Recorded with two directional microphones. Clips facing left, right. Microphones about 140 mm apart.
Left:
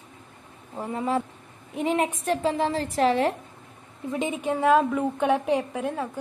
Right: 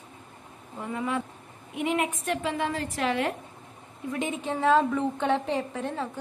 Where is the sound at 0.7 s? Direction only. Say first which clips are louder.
Left 4 dB; 35° left (ahead or behind).